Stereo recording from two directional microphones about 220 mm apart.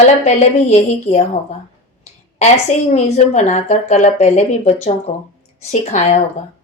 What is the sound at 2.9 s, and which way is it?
Speech, 30° left (ahead or behind).